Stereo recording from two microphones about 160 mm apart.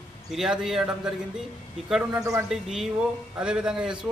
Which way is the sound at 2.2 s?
20° right (ahead or behind).